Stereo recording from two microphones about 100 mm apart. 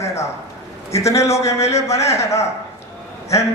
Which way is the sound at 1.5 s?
90° left.